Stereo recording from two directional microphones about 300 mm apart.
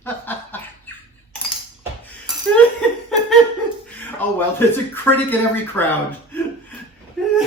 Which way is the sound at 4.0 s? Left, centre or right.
Centre.